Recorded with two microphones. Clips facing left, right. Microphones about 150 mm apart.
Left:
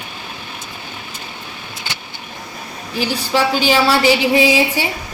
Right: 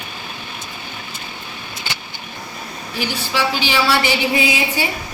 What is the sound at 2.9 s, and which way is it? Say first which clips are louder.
A woman's voice: left 4 dB; 40° left (ahead or behind).